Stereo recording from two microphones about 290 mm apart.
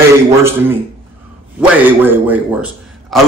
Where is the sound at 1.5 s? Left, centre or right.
Centre.